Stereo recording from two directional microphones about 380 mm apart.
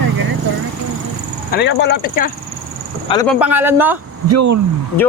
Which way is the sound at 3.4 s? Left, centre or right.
Centre.